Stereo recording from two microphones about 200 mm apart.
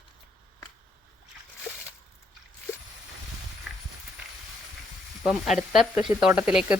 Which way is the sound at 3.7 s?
Centre (ahead or behind).